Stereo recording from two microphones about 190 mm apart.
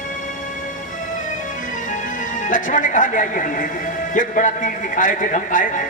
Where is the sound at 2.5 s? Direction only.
45° left (ahead or behind).